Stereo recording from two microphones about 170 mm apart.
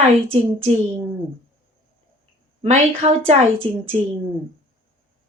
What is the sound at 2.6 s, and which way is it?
Speech, 40° right (ahead or behind).